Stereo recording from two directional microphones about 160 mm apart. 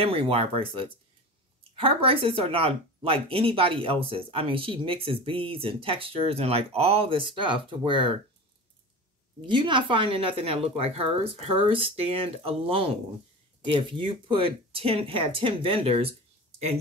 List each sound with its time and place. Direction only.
0.0 s speech: 35° right (ahead or behind)
9.5 s speech: 30° right (ahead or behind)